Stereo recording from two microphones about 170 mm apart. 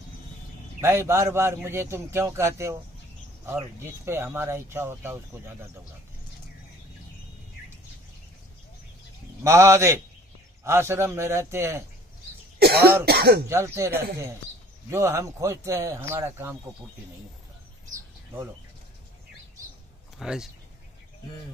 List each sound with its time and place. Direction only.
0.7 s speech: 15° right (ahead or behind)
9.4 s speech: 15° right (ahead or behind)
12.5 s cough: 65° right (ahead or behind)
13.0 s speech: 70° right (ahead or behind)
13.5 s speech: 15° right (ahead or behind)
20.2 s speech: 5° right (ahead or behind)